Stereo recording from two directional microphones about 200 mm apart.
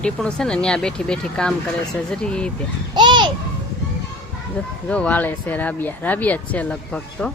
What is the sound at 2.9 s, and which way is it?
Speech, 20° right (ahead or behind).